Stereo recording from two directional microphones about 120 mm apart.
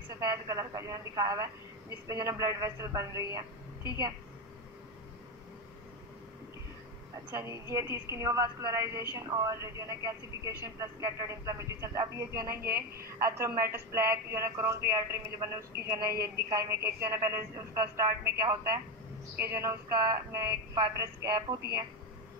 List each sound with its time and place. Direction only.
0.2 s a woman's voice: 30° right (ahead or behind)
7.2 s a woman's voice: 25° right (ahead or behind)